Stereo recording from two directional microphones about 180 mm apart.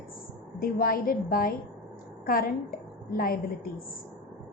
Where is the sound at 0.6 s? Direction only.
55° left (ahead or behind).